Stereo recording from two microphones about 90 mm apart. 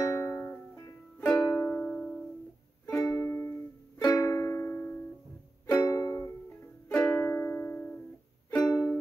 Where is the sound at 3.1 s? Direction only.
25° left (ahead or behind).